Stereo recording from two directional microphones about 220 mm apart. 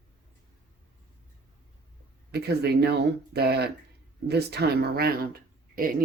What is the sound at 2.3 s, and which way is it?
Speech, 50° right (ahead or behind).